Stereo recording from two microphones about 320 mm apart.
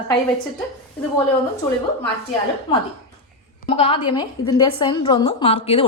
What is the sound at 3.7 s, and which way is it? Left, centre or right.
A woman's voice, centre.